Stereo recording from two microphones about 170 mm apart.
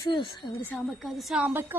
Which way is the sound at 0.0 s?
30° left (ahead or behind).